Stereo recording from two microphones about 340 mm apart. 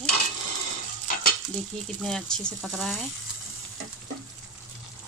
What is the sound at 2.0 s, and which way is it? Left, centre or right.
A woman's voice, centre.